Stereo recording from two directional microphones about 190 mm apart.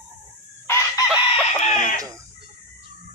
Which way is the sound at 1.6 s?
45° left (ahead or behind).